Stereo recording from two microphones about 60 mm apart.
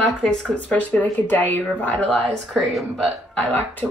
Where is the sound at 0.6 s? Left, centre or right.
Left.